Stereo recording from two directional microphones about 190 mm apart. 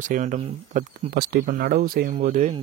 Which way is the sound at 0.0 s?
40° right (ahead or behind).